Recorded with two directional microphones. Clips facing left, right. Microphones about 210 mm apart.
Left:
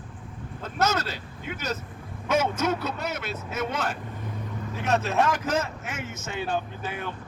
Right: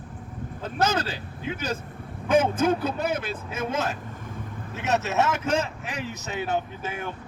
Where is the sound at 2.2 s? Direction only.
30° right (ahead or behind).